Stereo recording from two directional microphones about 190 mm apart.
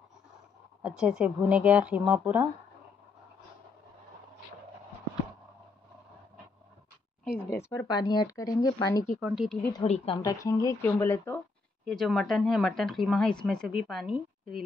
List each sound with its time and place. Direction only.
0.8 s a woman's voice: 5° right (ahead or behind)
7.4 s speech: 15° left (ahead or behind)
9.2 s speech: 5° right (ahead or behind)
9.6 s speech: 20° left (ahead or behind)
9.8 s speech: 30° left (ahead or behind)
10.2 s speech: 20° left (ahead or behind)
11.8 s speech: centre (ahead or behind)